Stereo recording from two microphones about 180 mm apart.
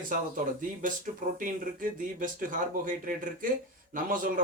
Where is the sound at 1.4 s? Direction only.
50° right (ahead or behind).